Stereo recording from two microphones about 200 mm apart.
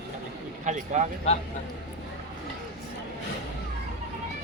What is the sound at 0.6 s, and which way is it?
Speech, 35° right (ahead or behind).